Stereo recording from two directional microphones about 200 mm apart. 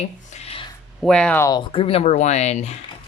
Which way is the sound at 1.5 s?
25° left (ahead or behind).